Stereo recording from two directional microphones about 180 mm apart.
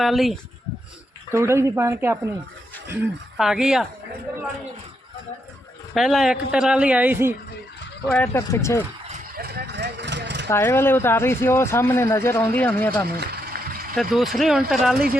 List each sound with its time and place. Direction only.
0.0 s speech: centre (ahead or behind)
1.3 s speech: 15° right (ahead or behind)
3.3 s speech: 5° right (ahead or behind)
5.9 s speech: centre (ahead or behind)
8.1 s speech: 10° left (ahead or behind)
9.4 s vehicle: 60° right (ahead or behind)
10.5 s speech: 15° left (ahead or behind)
13.1 s a sound: 60° right (ahead or behind)
13.9 s speech: centre (ahead or behind)